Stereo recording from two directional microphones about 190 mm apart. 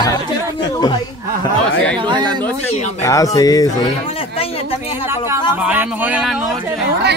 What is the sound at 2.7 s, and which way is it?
Speech, 35° left (ahead or behind).